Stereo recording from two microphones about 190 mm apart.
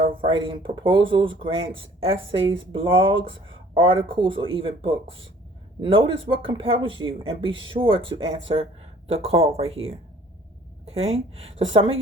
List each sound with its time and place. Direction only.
0.0 s a sound: 30° right (ahead or behind)
0.4 s speech: 25° right (ahead or behind)
10.8 s speech: 30° right (ahead or behind)